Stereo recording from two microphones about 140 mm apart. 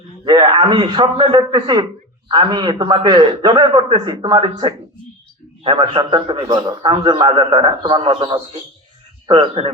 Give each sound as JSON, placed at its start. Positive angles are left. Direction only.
{"t": 0.5, "sound": "a man's voice", "side_deg": -35}